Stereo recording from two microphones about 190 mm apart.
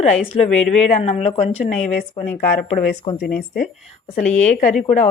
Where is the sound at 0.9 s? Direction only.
35° left (ahead or behind).